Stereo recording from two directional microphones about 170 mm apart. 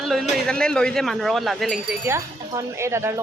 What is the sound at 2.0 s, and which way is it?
Speech, 15° right (ahead or behind).